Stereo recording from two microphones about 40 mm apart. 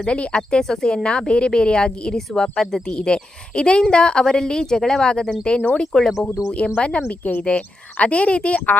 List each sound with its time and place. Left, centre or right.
0.0 s a woman's voice: left
0.6 s a woman's voice: centre
2.8 s a woman's voice: left
5.8 s speech: centre
6.2 s a woman's voice: left